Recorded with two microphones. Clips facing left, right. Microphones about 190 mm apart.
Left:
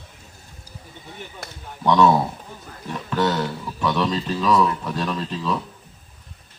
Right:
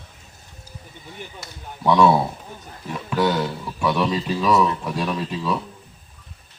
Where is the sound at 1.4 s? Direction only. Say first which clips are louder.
Left 3 dB; 55° left (ahead or behind).